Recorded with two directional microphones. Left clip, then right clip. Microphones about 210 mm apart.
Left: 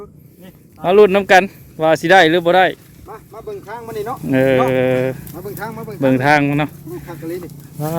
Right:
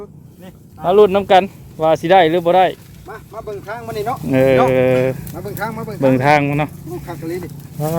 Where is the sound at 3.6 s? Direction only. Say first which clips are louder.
Right 3 dB; 10° right (ahead or behind).